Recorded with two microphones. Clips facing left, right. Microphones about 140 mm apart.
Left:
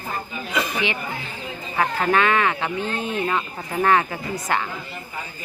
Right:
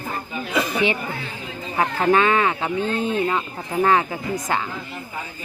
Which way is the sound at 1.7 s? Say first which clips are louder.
Right 2 dB; 20° right (ahead or behind).